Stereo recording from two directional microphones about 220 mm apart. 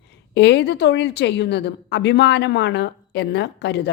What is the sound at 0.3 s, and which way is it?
A woman's voice, 50° left (ahead or behind).